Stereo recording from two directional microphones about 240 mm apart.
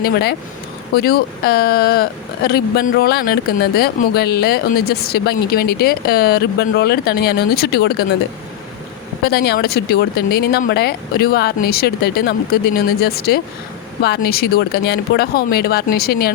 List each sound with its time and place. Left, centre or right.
0.0 s speech: left
9.2 s speech: left